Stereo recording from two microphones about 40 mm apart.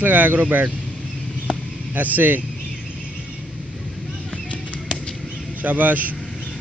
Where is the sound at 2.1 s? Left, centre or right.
Right.